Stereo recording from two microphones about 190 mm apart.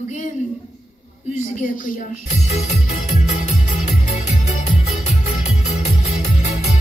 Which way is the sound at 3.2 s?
35° left (ahead or behind).